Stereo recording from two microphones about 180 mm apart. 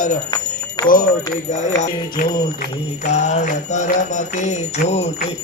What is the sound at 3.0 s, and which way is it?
Mantra, 40° left (ahead or behind).